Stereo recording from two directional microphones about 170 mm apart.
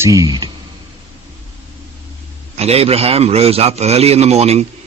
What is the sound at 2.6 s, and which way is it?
Speech, 35° right (ahead or behind).